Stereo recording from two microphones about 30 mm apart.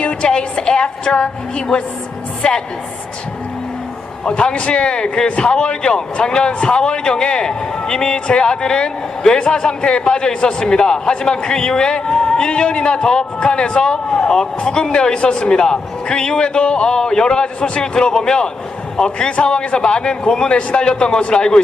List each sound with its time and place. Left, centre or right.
0.0 s a woman's voice: left
4.5 s a man's voice: left